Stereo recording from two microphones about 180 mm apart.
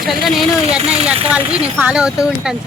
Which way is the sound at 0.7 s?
35° right (ahead or behind).